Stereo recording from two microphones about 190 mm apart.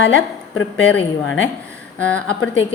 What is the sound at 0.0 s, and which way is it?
Speech, 70° left (ahead or behind).